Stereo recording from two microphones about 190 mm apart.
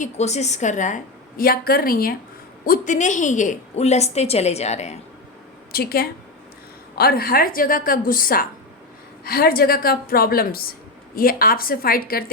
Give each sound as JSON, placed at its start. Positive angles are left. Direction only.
{"t": 0.0, "sound": "a woman's voice", "side_deg": 35}
{"t": 5.7, "sound": "a woman's voice", "side_deg": 55}